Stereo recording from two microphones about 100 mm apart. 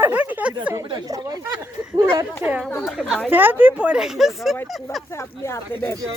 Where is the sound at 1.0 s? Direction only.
35° right (ahead or behind).